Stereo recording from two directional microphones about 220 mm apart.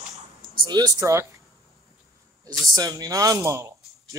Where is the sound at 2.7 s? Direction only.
15° right (ahead or behind).